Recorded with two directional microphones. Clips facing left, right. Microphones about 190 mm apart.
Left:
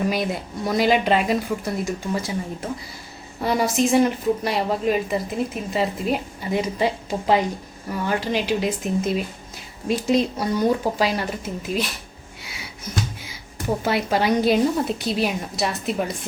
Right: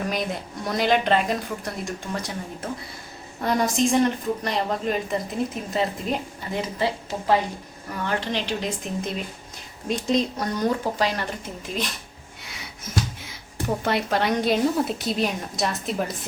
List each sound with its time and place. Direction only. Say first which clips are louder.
0.1 s a woman's voice: left 3 dB; 5° left (ahead or behind)
6.5 s speech: left 4 dB; 15° left (ahead or behind)
12.4 s a sound: left 2 dB; centre (ahead or behind)
13.8 s a woman's voice: left 3 dB; 5° left (ahead or behind)